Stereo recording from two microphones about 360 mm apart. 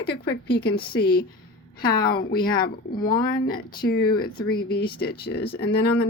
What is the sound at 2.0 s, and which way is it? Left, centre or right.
Speech, left.